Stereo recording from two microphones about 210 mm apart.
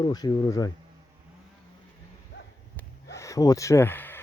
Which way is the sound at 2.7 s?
15° left (ahead or behind).